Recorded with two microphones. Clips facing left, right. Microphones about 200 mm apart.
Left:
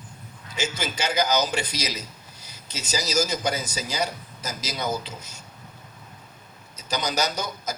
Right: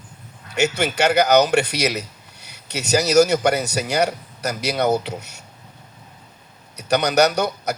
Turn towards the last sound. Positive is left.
turn(degrees=-65)  # may be behind; listen again after turning